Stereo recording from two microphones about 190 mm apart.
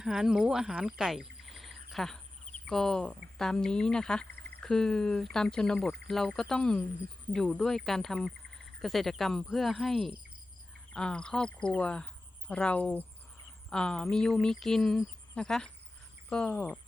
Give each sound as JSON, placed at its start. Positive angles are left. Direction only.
{"t": 0.0, "sound": "speech", "side_deg": -5}
{"t": 4.3, "sound": "a sound", "side_deg": -55}
{"t": 4.6, "sound": "speech", "side_deg": 5}